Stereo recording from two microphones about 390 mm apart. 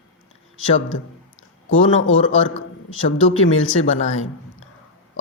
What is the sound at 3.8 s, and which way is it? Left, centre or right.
Speech, centre.